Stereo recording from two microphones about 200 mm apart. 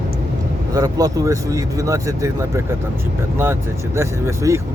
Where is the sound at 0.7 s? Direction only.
15° right (ahead or behind).